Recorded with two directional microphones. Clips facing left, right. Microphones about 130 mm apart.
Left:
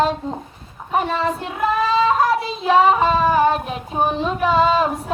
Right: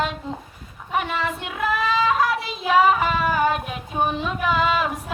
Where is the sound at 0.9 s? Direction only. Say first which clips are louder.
Left 5 dB; 35° left (ahead or behind).